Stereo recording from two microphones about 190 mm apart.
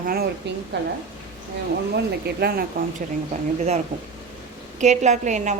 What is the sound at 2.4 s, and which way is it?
Speech, 55° right (ahead or behind).